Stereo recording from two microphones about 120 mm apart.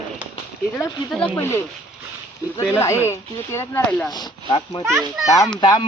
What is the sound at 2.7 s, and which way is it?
Speech, 25° left (ahead or behind).